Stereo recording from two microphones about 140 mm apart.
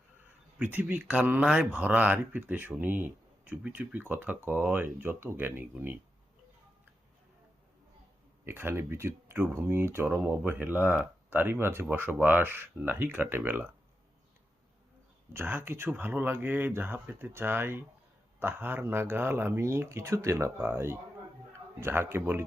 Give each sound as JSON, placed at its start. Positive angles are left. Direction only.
{"t": 0.6, "sound": "speech", "side_deg": -10}
{"t": 8.4, "sound": "speech", "side_deg": -15}
{"t": 15.3, "sound": "speech", "side_deg": -15}